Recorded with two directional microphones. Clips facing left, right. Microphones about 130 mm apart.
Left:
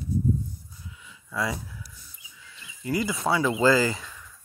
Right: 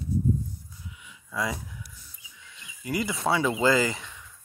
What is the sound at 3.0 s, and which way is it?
Speech, 25° right (ahead or behind).